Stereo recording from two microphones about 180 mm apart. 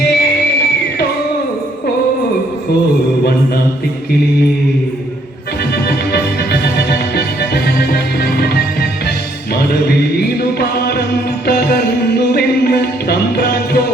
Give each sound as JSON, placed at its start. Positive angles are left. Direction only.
{"t": 0.0, "sound": "music", "side_deg": 60}
{"t": 5.7, "sound": "music", "side_deg": 60}
{"t": 12.3, "sound": "music", "side_deg": 60}